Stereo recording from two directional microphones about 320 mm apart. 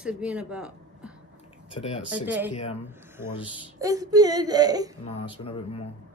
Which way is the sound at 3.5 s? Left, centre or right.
Centre.